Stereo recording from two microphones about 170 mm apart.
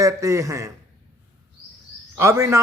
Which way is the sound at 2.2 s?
15° right (ahead or behind).